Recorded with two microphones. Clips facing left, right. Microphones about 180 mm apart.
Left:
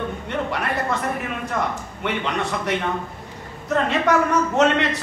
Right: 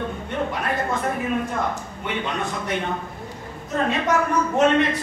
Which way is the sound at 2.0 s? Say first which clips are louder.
Left 3 dB; 75° left (ahead or behind).